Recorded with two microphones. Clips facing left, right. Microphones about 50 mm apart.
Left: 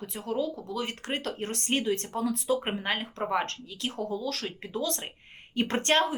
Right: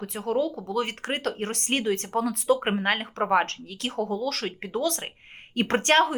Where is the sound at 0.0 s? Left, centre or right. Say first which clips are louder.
Right 5 dB; right.